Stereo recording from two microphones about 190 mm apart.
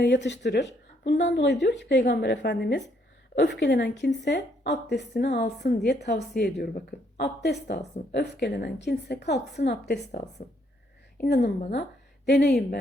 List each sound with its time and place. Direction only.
0.0 s speech: 65° left (ahead or behind)
11.2 s a woman's voice: 55° left (ahead or behind)